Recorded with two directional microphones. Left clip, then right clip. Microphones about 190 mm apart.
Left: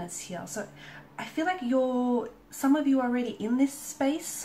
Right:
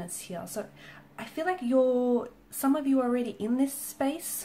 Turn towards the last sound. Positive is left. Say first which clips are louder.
# left 2 dB
turn(degrees=-45)  # may be behind; listen again after turning